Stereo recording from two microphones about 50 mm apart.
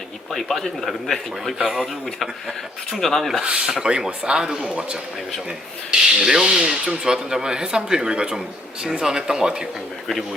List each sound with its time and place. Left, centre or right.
0.3 s a man's voice: centre
1.5 s speech: centre
2.9 s a man's voice: centre
3.4 s a man's voice: centre
6.1 s speech: centre